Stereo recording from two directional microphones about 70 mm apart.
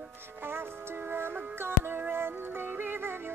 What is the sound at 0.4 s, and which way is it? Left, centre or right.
Music, right.